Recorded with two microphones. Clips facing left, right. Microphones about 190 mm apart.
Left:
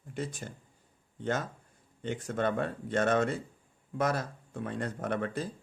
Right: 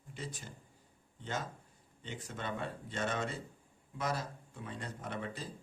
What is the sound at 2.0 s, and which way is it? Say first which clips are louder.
Speech: left 12 dB; 55° left (ahead or behind).